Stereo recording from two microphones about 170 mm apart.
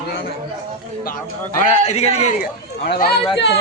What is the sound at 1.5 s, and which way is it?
Speech, 45° left (ahead or behind).